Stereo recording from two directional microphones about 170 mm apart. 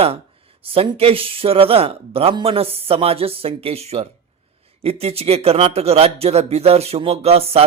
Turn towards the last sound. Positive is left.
turn(degrees=-35)  # may be behind; listen again after turning